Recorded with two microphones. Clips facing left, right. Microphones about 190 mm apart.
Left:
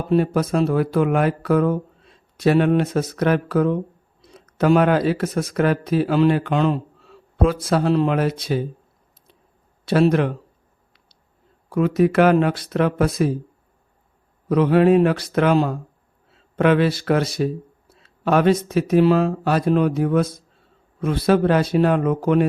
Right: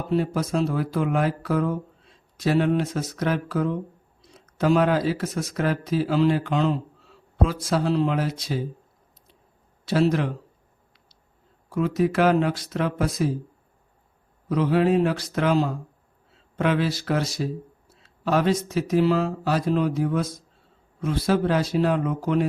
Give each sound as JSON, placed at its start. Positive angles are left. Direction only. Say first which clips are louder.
{"t": 0.1, "sound": "speech", "louder": "left 5 dB", "side_deg": 60}
{"t": 9.8, "sound": "speech", "louder": "left 5 dB", "side_deg": 60}
{"t": 11.7, "sound": "speech", "louder": "left 5 dB", "side_deg": 60}
{"t": 14.5, "sound": "speech", "louder": "left 5 dB", "side_deg": 60}